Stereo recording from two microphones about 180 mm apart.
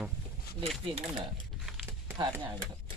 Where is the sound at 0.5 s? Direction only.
30° right (ahead or behind).